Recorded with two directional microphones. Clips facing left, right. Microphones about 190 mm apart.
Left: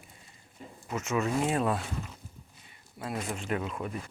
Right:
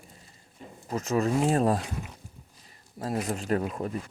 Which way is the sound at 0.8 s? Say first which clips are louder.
Right 4 dB; 35° right (ahead or behind).